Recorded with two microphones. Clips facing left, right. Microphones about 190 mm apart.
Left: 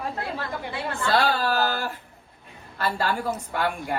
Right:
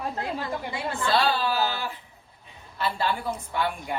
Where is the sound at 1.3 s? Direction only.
55° left (ahead or behind).